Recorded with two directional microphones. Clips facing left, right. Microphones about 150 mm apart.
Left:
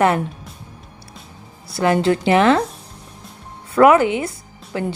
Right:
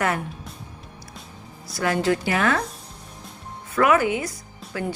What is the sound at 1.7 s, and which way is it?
Speech, 25° left (ahead or behind).